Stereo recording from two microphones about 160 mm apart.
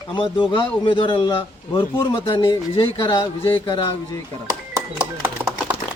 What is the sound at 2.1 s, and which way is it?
Speech, 35° left (ahead or behind).